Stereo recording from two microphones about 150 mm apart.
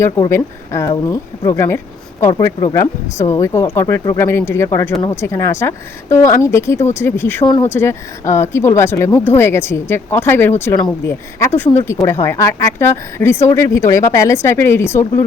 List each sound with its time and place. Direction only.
0.0 s speech: 20° left (ahead or behind)